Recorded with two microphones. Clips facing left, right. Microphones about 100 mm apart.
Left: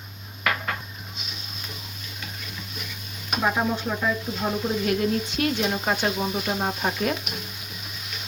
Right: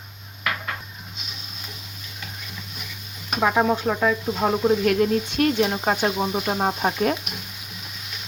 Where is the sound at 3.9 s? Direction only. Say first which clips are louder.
Right 5 dB; 90° right.